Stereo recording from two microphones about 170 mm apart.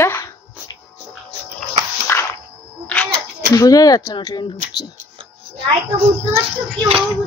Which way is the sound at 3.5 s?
20° left (ahead or behind).